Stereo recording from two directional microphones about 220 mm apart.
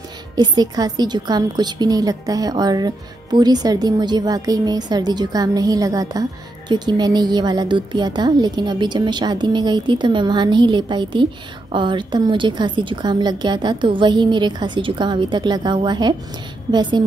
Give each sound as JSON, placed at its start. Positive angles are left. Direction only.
{"t": 0.4, "sound": "a woman's voice", "side_deg": -20}